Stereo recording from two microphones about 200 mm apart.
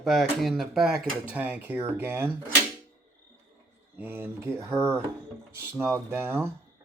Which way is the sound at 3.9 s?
10° right (ahead or behind).